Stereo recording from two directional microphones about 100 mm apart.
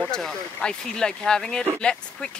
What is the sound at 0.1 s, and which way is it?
Speech, 5° left (ahead or behind).